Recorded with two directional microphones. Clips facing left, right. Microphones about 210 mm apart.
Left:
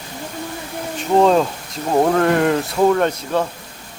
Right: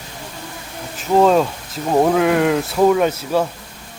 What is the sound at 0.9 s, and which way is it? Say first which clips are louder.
Speech: even; centre (ahead or behind).